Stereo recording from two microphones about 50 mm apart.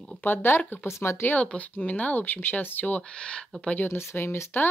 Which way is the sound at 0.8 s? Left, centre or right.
Left.